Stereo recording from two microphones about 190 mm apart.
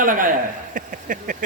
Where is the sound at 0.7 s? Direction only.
45° right (ahead or behind).